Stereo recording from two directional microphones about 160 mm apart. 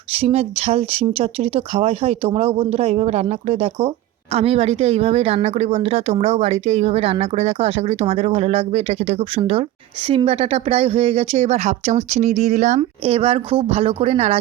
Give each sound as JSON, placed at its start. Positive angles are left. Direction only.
{"t": 0.2, "sound": "speech", "side_deg": -40}